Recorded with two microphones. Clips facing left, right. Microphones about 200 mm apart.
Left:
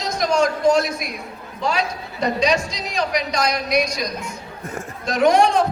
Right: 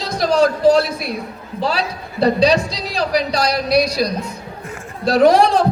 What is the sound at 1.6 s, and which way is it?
A woman's voice, 35° right (ahead or behind).